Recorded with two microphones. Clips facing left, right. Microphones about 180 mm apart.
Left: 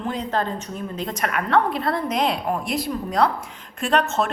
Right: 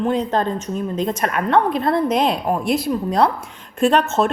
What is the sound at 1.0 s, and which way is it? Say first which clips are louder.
A woman's voice: right 3 dB; 25° right (ahead or behind).